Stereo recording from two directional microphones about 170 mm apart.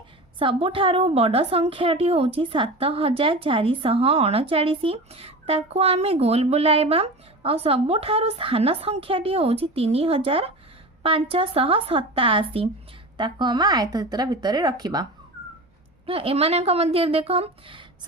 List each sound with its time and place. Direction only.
0.3 s a woman's voice: 30° right (ahead or behind)
16.0 s a woman's voice: 35° right (ahead or behind)